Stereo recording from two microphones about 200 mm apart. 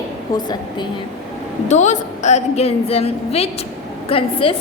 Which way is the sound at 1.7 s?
35° left (ahead or behind).